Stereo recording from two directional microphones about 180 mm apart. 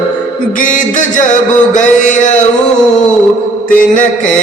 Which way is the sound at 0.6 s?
45° left (ahead or behind).